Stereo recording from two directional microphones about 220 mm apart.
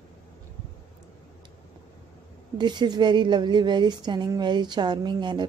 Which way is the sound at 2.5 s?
20° right (ahead or behind).